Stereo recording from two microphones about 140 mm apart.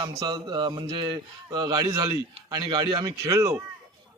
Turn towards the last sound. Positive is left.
turn(degrees=-25)  # may be behind; listen again after turning